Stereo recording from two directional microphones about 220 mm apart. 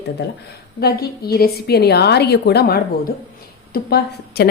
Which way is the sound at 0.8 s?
45° left (ahead or behind).